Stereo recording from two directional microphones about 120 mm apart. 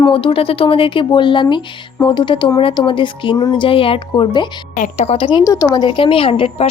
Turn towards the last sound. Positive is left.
turn(degrees=50)  # may be behind; listen again after turning